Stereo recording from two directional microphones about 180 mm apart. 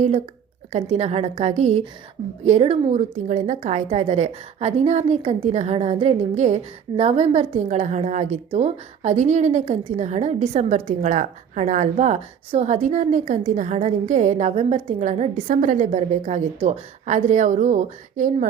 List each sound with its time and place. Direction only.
0.7 s a woman's voice: 40° right (ahead or behind)